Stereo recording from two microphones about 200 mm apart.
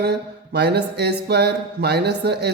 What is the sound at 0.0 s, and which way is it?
Speech, 55° right (ahead or behind).